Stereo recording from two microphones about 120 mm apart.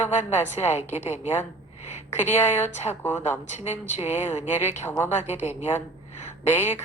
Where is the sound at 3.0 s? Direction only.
15° left (ahead or behind).